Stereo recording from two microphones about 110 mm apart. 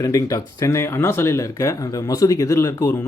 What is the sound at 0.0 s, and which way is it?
Speech, 30° left (ahead or behind).